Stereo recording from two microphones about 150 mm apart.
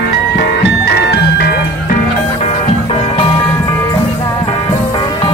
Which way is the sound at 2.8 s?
35° left (ahead or behind).